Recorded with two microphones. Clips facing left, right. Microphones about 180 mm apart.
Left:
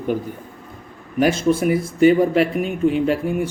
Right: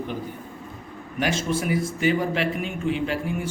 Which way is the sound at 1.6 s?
50° left (ahead or behind).